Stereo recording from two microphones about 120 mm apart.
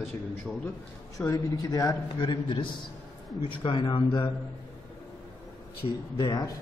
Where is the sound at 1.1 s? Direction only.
30° left (ahead or behind).